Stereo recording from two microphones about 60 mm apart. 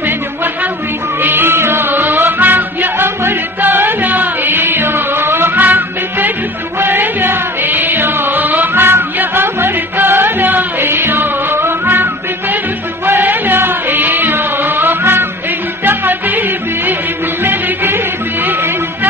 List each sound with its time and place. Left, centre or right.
1.2 s music: right